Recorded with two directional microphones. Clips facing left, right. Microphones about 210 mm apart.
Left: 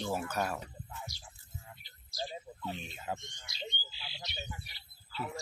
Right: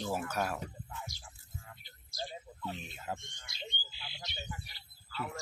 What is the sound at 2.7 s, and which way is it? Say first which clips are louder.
Speech: left 1 dB; centre (ahead or behind).